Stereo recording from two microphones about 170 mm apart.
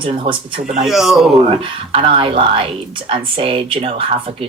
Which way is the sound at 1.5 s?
35° right (ahead or behind).